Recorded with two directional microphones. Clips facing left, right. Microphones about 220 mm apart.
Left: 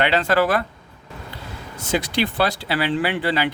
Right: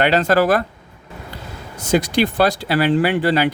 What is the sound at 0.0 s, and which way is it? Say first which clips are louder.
Speech: right 3 dB; 40° right (ahead or behind).